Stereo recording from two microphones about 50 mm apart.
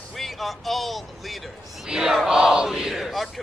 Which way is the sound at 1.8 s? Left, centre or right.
Centre.